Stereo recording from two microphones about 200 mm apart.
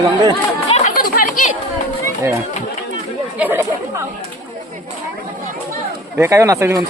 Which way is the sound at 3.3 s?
10° right (ahead or behind).